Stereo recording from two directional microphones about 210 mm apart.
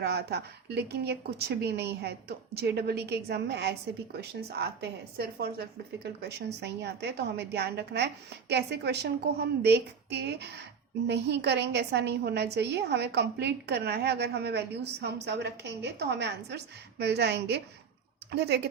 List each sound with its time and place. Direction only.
0.0 s a woman's voice: 50° right (ahead or behind)